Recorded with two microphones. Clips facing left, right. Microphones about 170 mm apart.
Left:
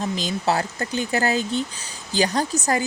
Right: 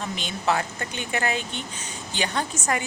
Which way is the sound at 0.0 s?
35° left (ahead or behind).